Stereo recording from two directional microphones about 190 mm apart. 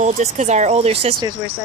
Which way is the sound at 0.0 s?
40° right (ahead or behind).